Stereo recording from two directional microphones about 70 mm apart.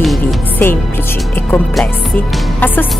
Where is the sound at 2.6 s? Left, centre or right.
Left.